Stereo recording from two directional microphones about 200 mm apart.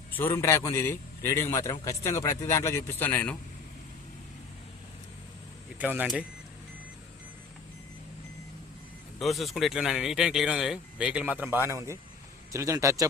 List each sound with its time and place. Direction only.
0.1 s a man's voice: 10° left (ahead or behind)
5.8 s a man's voice: 5° right (ahead or behind)
9.2 s a man's voice: centre (ahead or behind); by 13.1 s 15° right (ahead or behind)